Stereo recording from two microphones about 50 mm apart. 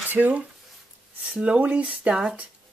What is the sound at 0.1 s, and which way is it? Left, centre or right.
Speech, right.